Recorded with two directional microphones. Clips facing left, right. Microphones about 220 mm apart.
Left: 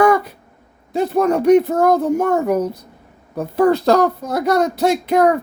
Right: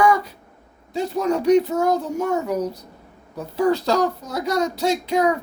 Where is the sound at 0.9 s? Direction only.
55° left (ahead or behind).